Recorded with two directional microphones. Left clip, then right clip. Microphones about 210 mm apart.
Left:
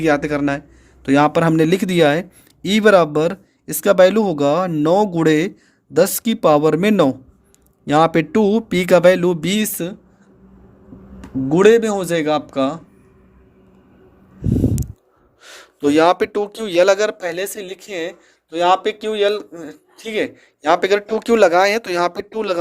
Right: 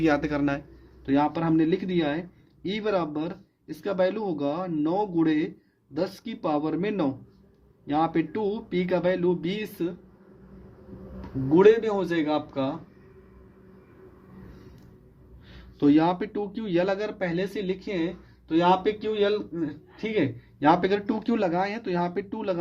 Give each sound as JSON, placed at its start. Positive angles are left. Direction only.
{"t": 0.0, "sound": "speech", "side_deg": 25}
{"t": 1.0, "sound": "a man's voice", "side_deg": 50}
{"t": 11.5, "sound": "a man's voice", "side_deg": 45}
{"t": 15.4, "sound": "a man's voice", "side_deg": 50}